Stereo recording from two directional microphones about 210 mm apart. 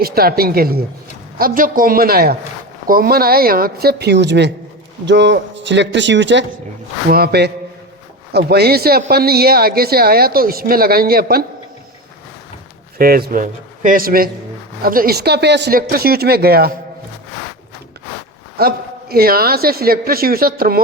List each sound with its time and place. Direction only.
0.0 s a man's voice: 45° right (ahead or behind)
7.1 s a man's voice: 45° right (ahead or behind)
13.0 s a man's voice: 45° right (ahead or behind)
18.5 s a man's voice: 45° right (ahead or behind)